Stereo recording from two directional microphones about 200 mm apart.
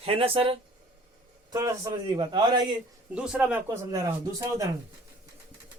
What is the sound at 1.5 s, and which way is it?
A man's voice, 15° right (ahead or behind).